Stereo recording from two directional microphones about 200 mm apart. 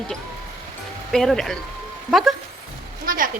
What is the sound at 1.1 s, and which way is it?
Speech, centre (ahead or behind).